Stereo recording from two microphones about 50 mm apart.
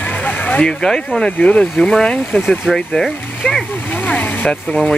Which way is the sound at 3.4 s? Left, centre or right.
Centre.